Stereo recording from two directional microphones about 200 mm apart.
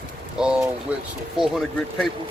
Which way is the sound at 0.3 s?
5° right (ahead or behind).